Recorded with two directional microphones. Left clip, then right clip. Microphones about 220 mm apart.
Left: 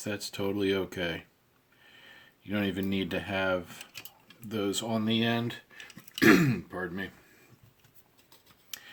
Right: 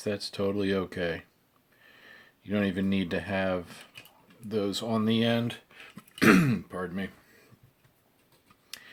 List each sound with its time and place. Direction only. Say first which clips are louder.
0.0 s speech: right 3 dB; 20° right (ahead or behind)